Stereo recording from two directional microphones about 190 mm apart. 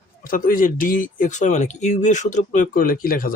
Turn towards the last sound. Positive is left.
turn(degrees=50)  # may be behind; listen again after turning